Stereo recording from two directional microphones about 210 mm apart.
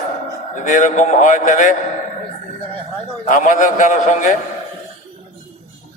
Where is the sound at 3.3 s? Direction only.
35° left (ahead or behind).